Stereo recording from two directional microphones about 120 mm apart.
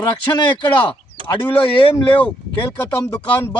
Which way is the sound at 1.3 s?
45° left (ahead or behind).